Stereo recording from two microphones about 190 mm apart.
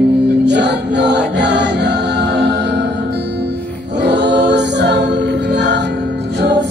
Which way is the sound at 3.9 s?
65° right (ahead or behind).